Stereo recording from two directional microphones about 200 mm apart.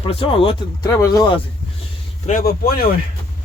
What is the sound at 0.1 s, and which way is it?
Speech, 30° left (ahead or behind).